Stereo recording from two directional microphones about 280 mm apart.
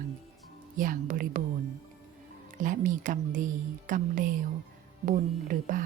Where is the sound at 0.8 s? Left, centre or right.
Right.